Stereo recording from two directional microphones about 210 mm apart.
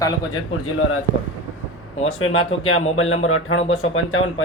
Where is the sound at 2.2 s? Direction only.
75° left (ahead or behind).